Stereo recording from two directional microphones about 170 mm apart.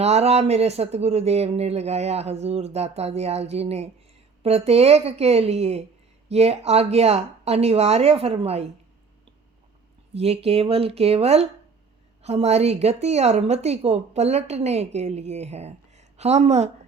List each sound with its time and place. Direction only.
0.0 s a woman's voice: 40° right (ahead or behind)
10.2 s a woman's voice: 35° right (ahead or behind)